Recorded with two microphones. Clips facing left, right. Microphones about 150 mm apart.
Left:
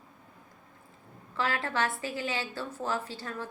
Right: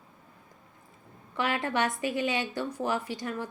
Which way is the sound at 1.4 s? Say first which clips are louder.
Right 2 dB; 20° right (ahead or behind).